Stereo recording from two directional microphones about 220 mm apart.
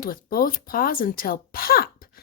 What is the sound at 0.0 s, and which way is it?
Speech, 40° left (ahead or behind).